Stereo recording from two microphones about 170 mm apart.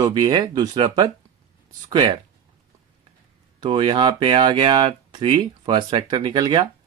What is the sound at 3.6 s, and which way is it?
Speech, 30° right (ahead or behind).